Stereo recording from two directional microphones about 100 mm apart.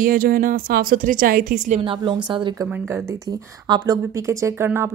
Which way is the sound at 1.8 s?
60° right (ahead or behind).